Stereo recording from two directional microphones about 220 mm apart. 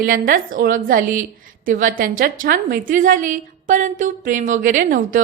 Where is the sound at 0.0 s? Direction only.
40° right (ahead or behind).